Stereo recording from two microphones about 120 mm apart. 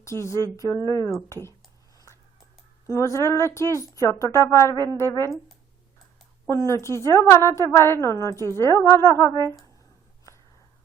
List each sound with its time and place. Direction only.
0.0 s a sound: 25° left (ahead or behind)
0.5 s a woman's voice: 25° left (ahead or behind)
2.8 s a woman's voice: 25° left (ahead or behind)
6.7 s a woman's voice: 25° left (ahead or behind)